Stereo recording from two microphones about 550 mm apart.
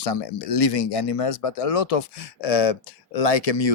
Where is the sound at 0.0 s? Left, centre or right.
Left.